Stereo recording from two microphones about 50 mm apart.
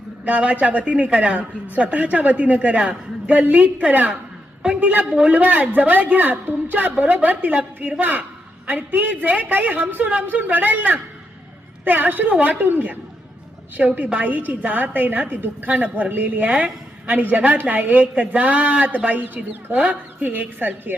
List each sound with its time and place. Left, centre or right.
0.3 s a woman's voice: right